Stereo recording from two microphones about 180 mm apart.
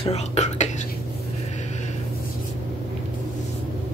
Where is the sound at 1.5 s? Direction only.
40° left (ahead or behind).